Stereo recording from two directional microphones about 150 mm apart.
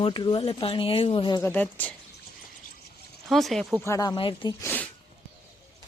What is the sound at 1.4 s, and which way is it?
Speech, 10° left (ahead or behind).